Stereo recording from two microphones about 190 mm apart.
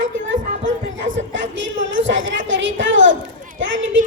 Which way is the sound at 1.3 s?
80° right.